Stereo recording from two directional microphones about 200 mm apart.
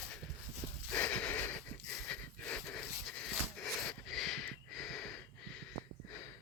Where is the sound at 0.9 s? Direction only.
5° left (ahead or behind).